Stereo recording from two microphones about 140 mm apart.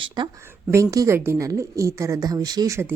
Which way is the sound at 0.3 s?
20° right (ahead or behind).